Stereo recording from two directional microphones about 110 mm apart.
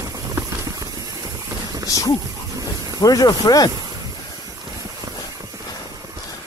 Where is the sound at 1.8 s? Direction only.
30° left (ahead or behind).